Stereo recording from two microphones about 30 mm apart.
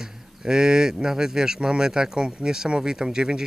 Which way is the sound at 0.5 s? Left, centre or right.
Right.